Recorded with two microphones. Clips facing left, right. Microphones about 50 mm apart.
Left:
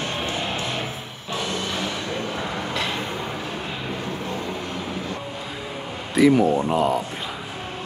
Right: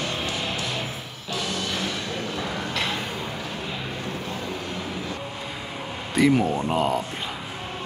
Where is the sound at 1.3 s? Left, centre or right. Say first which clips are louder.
Left 2 dB; left.